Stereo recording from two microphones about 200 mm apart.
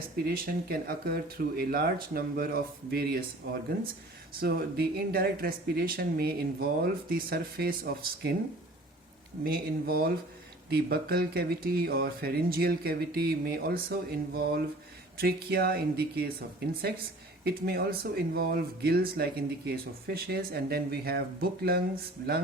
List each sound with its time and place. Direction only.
0.3 s speech: 50° right (ahead or behind)
4.4 s speech: 50° right (ahead or behind)
9.4 s speech: 50° right (ahead or behind)